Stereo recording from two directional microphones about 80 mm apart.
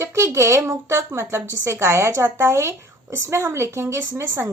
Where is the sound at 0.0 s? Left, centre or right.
Right.